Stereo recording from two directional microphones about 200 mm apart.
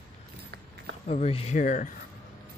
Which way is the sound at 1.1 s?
30° left (ahead or behind).